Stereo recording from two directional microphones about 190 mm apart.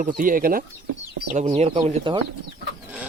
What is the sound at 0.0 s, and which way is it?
Speech, 45° right (ahead or behind).